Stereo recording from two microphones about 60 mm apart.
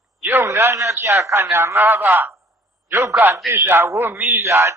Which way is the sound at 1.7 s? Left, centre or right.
Right.